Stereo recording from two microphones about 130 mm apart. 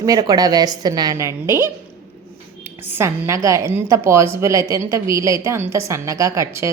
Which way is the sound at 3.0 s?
20° right (ahead or behind).